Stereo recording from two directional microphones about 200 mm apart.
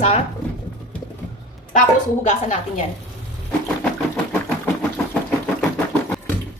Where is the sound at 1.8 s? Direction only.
35° left (ahead or behind).